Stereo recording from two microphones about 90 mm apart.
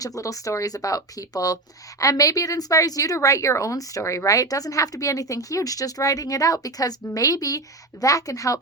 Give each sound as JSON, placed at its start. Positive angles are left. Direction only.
{"t": 0.2, "sound": "speech", "side_deg": 40}